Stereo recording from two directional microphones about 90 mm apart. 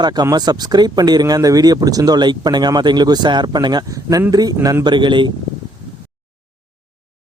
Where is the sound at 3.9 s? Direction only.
40° right (ahead or behind).